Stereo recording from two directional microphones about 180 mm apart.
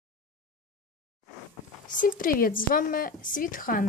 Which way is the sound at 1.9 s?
50° left (ahead or behind).